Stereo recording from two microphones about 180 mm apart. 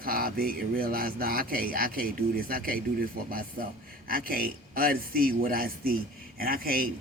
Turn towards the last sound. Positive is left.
turn(degrees=-55)  # may be behind; listen again after turning